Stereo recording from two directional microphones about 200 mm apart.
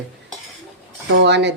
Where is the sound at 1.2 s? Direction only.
60° right (ahead or behind).